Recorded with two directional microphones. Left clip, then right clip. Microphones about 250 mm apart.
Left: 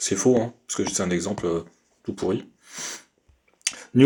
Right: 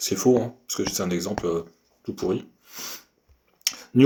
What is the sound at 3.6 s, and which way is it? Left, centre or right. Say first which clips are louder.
Clicking: even; left.